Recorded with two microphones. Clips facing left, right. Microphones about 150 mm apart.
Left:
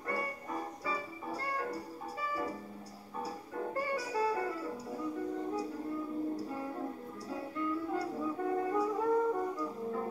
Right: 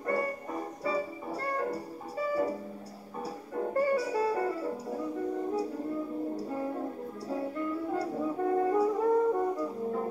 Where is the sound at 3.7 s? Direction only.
30° right (ahead or behind).